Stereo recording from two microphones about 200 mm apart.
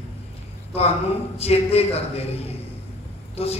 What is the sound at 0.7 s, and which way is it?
A man's voice, 30° left (ahead or behind).